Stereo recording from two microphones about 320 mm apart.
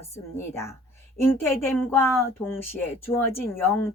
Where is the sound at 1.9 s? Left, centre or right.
Centre.